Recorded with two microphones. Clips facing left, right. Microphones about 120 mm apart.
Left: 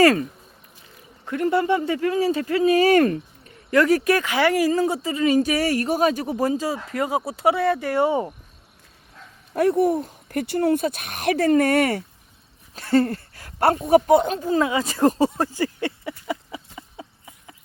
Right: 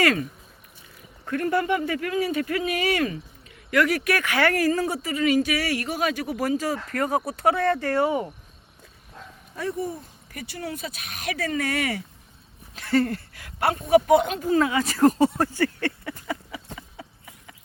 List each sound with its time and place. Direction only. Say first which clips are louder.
0.0 s speech: left 6 dB; 35° left (ahead or behind)
1.3 s speech: left 3 dB; 20° left (ahead or behind); by 3.2 s 45° left (ahead or behind)
3.7 s speech: left 5 dB; 30° left (ahead or behind)
9.6 s speech: left 11 dB; 65° left (ahead or behind); by 12.0 s 50° left (ahead or behind)
12.7 s speech: left 3 dB; 35° left (ahead or behind); by 16.6 s 20° left (ahead or behind)
16.7 s chicken: left 2 dB; 25° left (ahead or behind)